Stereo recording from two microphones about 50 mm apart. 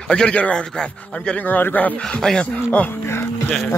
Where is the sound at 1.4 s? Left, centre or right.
Left.